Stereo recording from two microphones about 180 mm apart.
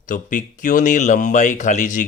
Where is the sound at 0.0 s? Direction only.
45° left (ahead or behind).